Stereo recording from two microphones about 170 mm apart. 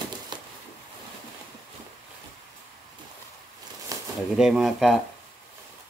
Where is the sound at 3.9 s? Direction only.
20° right (ahead or behind).